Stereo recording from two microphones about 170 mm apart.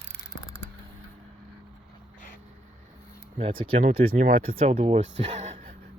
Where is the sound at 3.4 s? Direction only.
30° right (ahead or behind).